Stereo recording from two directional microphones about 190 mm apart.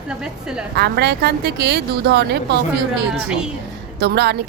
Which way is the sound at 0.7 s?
60° right (ahead or behind).